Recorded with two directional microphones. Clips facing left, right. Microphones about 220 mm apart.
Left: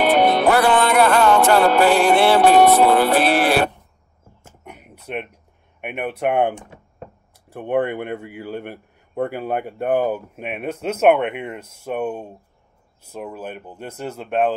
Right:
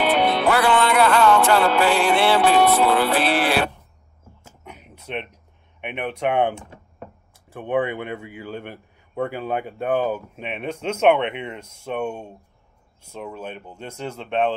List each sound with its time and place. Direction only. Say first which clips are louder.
0.0 s music: left 4 dB; 45° left (ahead or behind)
4.6 s a sound: left 2 dB; 5° left (ahead or behind)
5.8 s a man's voice: left 2 dB; 10° left (ahead or behind)
7.5 s a man's voice: left 2 dB; 10° left (ahead or behind)